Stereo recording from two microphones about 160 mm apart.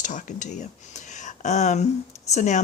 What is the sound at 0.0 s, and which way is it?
Speech, 50° left (ahead or behind).